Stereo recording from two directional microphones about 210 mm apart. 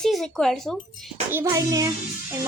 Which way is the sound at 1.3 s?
15° right (ahead or behind).